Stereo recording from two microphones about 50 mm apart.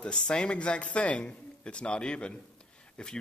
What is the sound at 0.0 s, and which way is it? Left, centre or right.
A man's voice, left.